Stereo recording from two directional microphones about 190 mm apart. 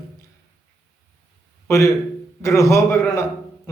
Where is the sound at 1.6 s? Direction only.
15° left (ahead or behind).